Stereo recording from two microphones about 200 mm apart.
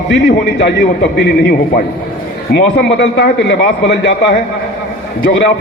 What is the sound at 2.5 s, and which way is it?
A man's voice, 60° left (ahead or behind).